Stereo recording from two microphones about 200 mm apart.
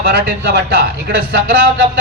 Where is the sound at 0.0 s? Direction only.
55° right (ahead or behind).